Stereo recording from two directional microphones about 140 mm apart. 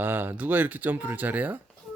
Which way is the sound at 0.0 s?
15° right (ahead or behind).